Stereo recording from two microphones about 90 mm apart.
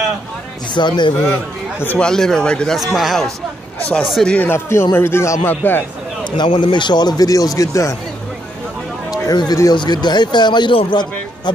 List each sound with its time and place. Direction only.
0.7 s a man's voice: 55° left (ahead or behind)
2.0 s a man's voice: 5° left (ahead or behind)
4.4 s a man's voice: 25° left (ahead or behind)
6.3 s a man's voice: 60° left (ahead or behind); by 7.9 s 40° left (ahead or behind)
9.1 s a sound: 50° left (ahead or behind)
9.7 s a man's voice: 55° left (ahead or behind); by 11.0 s 70° left (ahead or behind)